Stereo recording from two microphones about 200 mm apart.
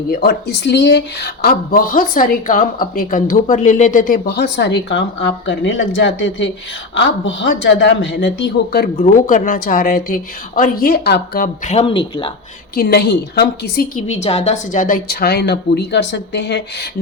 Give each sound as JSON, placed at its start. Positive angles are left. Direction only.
{"t": 0.1, "sound": "speech", "side_deg": 50}
{"t": 9.2, "sound": "speech", "side_deg": 45}
{"t": 12.7, "sound": "speech", "side_deg": 50}
{"t": 14.1, "sound": "speech", "side_deg": 30}